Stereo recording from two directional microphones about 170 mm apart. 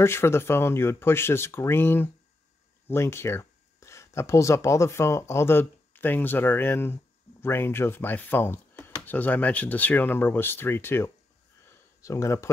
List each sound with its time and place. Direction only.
0.0 s speech: 15° left (ahead or behind)